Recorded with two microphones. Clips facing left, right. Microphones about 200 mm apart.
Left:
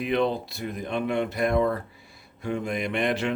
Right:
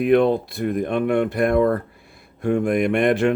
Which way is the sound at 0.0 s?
50° right (ahead or behind).